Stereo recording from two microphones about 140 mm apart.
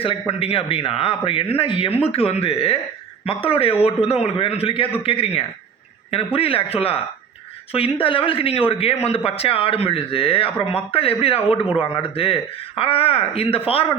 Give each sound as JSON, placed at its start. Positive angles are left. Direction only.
{"t": 0.0, "sound": "a man's voice", "side_deg": 45}